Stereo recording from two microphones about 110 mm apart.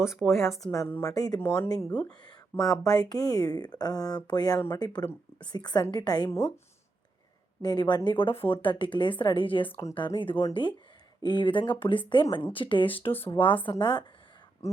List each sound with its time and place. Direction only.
0.0 s speech: 5° right (ahead or behind)
0.3 s a woman's voice: 25° left (ahead or behind)
1.1 s speech: 35° left (ahead or behind)
1.9 s speech: 10° left (ahead or behind)
2.6 s speech: 30° left (ahead or behind)
7.6 s a woman's voice: 40° left (ahead or behind)
13.1 s a woman's voice: 20° left (ahead or behind)
13.3 s a woman's voice: 50° left (ahead or behind)